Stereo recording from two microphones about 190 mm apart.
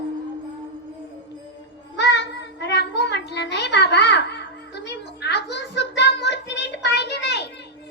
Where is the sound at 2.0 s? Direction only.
65° left (ahead or behind).